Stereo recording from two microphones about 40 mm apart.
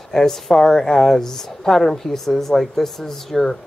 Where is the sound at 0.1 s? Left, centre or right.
Centre.